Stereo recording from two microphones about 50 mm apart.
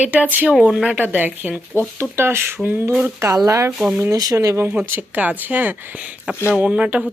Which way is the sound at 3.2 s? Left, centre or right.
Right.